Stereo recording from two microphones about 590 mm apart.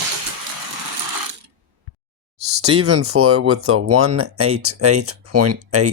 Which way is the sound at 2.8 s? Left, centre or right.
Right.